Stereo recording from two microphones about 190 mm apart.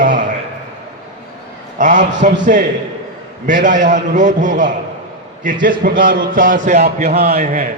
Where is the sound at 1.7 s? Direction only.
40° right (ahead or behind).